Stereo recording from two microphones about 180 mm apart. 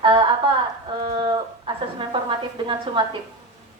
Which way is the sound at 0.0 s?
25° right (ahead or behind).